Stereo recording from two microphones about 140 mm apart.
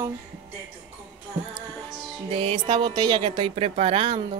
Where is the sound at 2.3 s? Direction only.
45° right (ahead or behind).